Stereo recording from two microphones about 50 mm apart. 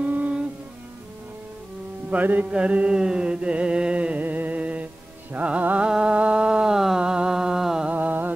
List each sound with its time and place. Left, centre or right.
0.0 s music: right
2.0 s music: right
2.5 s mantra: right
4.2 s music: right
5.3 s mantra: right
5.9 s a sound: centre
7.9 s music: right